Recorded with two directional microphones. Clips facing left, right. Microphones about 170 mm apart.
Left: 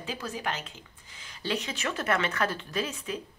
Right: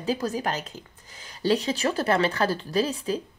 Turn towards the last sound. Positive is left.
turn(degrees=-35)  # may be behind; listen again after turning